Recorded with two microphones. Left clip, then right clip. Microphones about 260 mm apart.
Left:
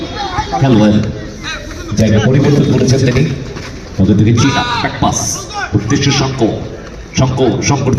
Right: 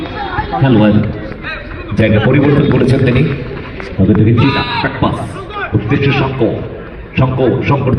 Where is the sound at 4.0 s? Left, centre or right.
Centre.